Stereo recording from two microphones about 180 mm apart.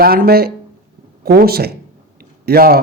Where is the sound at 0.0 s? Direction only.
55° right (ahead or behind).